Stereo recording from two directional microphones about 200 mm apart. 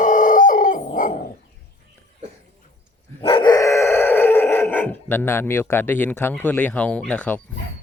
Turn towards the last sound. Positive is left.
turn(degrees=5)  # may be behind; listen again after turning